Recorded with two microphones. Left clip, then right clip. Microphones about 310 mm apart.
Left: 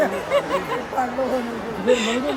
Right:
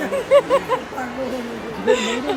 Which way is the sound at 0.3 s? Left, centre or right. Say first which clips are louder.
Right 7 dB; centre.